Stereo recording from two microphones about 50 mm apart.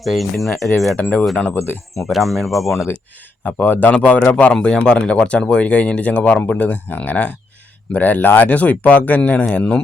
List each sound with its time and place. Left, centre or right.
0.0 s speech: centre
2.0 s speech: centre
3.4 s speech: left
4.5 s speech: centre; by 9.8 s left